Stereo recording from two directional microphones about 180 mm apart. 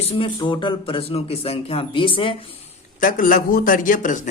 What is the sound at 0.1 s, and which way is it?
Speech, 30° left (ahead or behind).